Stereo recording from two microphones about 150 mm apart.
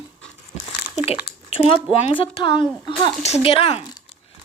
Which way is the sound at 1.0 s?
40° left (ahead or behind).